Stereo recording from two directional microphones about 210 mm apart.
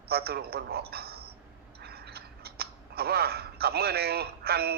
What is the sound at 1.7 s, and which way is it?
Scissors, 50° right (ahead or behind).